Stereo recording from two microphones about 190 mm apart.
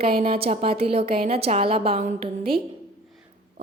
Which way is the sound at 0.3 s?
30° right (ahead or behind).